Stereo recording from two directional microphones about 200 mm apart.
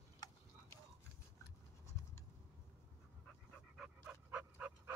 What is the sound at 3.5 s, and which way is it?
Dog, 5° right (ahead or behind).